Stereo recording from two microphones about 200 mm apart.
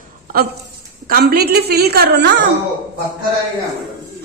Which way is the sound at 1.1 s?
50° right (ahead or behind).